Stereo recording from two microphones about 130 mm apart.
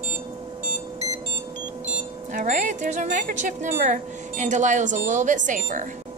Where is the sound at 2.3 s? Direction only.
80° right.